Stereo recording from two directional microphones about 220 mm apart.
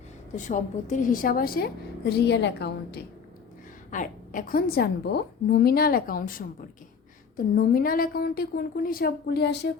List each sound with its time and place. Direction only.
0.3 s a woman's voice: 35° left (ahead or behind); by 3.0 s 50° left (ahead or behind)
3.9 s a woman's voice: 35° left (ahead or behind)
7.5 s a woman's voice: 40° left (ahead or behind)